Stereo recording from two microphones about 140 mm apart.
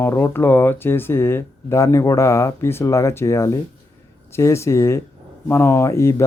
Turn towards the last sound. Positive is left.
turn(degrees=20)  # may be behind; listen again after turning